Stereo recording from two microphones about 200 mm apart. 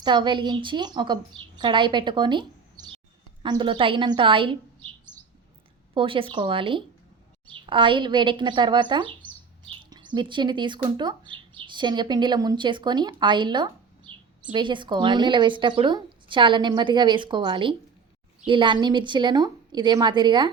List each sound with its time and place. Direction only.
0.0 s speech: 20° right (ahead or behind)
5.9 s speech: 25° right (ahead or behind)